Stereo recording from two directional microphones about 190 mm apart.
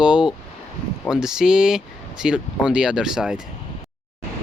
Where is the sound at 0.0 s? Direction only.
5° right (ahead or behind).